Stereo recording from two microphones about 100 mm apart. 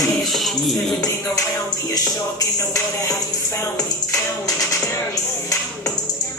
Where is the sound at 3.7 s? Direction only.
35° left (ahead or behind).